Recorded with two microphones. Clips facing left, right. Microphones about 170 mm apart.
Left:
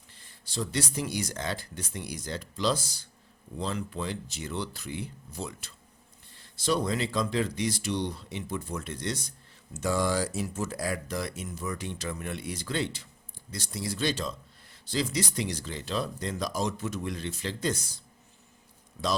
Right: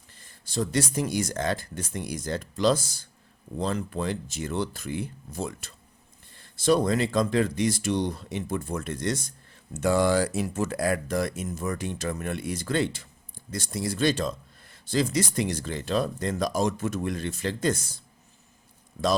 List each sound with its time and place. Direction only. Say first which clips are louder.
0.2 s a man's voice: right 5 dB; 45° right (ahead or behind)
9.7 s a man's voice: right 5 dB; 60° right (ahead or behind)